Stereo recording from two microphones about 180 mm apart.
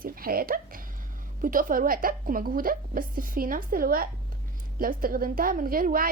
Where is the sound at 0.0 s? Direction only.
55° right (ahead or behind).